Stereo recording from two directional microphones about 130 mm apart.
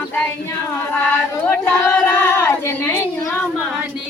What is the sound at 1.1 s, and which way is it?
Female singing, 15° left (ahead or behind).